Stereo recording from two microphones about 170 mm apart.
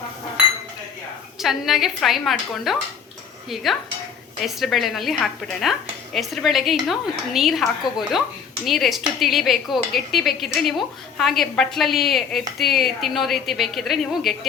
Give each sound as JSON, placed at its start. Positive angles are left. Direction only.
{"t": 1.4, "sound": "speech", "side_deg": 0}